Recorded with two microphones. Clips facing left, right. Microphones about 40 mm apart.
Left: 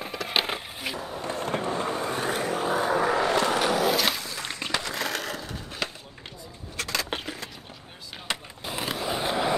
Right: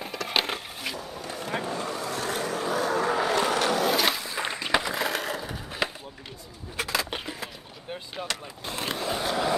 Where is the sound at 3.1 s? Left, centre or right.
Centre.